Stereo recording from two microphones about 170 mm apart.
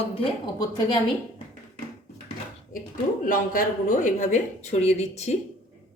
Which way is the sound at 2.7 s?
55° left (ahead or behind).